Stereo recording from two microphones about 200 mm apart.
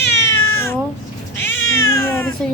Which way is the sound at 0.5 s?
10° left (ahead or behind).